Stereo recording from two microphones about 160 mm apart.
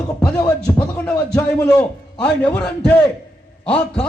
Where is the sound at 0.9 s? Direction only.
10° left (ahead or behind).